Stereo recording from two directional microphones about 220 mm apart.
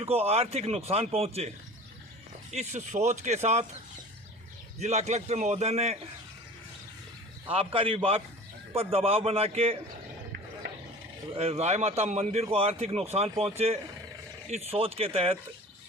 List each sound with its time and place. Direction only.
0.0 s a man's voice: 25° right (ahead or behind)
2.5 s speech: 30° right (ahead or behind)
4.8 s speech: 30° right (ahead or behind)
7.5 s a man's voice: 25° right (ahead or behind)
11.3 s a man's voice: 30° right (ahead or behind)
14.5 s a man's voice: 25° right (ahead or behind)